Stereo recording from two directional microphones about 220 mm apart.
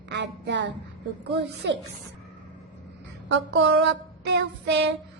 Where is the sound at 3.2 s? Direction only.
55° right (ahead or behind).